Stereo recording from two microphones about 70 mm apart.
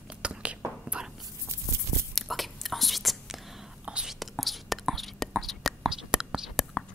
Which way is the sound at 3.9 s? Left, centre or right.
Centre.